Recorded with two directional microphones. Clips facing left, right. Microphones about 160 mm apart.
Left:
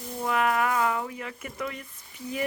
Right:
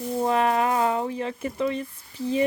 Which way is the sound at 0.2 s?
30° right (ahead or behind).